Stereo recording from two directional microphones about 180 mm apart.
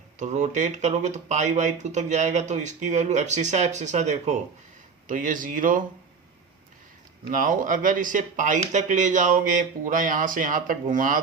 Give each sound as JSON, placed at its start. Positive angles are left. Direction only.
{"t": 0.2, "sound": "speech", "side_deg": -40}
{"t": 7.3, "sound": "speech", "side_deg": -50}